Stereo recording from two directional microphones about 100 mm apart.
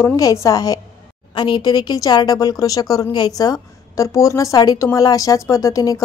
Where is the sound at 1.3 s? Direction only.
50° left (ahead or behind).